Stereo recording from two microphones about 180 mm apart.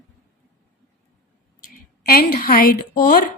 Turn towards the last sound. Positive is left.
turn(degrees=55)  # may be behind; listen again after turning